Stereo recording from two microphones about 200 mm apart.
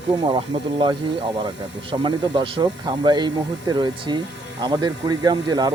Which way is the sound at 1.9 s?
25° right (ahead or behind).